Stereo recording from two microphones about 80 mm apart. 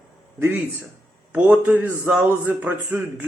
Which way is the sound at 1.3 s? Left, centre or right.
Centre.